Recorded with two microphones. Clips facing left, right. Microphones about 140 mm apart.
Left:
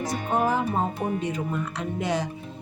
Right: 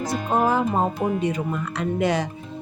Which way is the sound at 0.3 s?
90° right.